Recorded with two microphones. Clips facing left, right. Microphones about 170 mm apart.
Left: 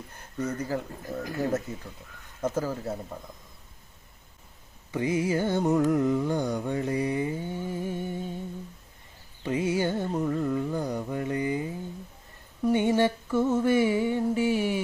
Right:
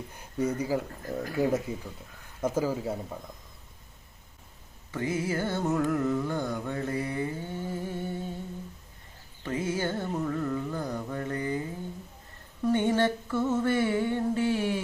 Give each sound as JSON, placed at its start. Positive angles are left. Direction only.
{"t": 0.2, "sound": "speech", "side_deg": -10}
{"t": 4.9, "sound": "carnatic music", "side_deg": 15}
{"t": 9.4, "sound": "mantra", "side_deg": 15}
{"t": 12.6, "sound": "a sound", "side_deg": 10}